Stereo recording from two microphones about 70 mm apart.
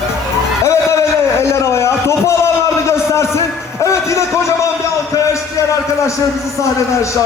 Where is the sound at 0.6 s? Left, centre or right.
Left.